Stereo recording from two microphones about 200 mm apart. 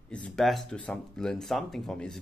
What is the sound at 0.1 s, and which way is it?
Speech, 5° left (ahead or behind).